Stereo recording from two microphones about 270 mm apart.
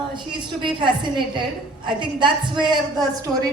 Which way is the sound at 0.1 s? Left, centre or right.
Centre.